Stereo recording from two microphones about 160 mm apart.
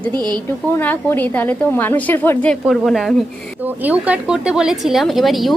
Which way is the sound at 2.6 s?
Centre (ahead or behind).